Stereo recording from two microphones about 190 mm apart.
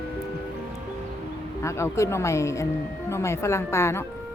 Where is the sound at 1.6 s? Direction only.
15° left (ahead or behind).